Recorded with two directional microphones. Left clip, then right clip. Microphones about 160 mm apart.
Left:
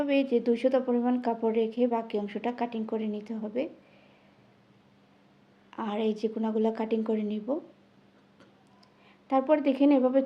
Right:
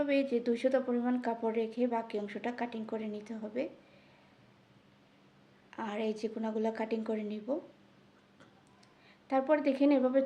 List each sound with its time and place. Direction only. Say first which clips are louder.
0.0 s a woman's voice: left 5 dB; 30° left (ahead or behind)
5.7 s a woman's voice: left 5 dB; 30° left (ahead or behind)
9.2 s a woman's voice: left 4 dB; 30° left (ahead or behind)